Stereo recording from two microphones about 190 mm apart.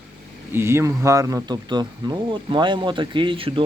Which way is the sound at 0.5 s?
15° right (ahead or behind).